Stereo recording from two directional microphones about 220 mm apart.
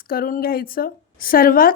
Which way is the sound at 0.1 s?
40° left (ahead or behind).